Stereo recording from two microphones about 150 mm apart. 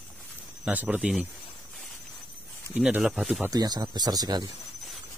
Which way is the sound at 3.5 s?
25° right (ahead or behind).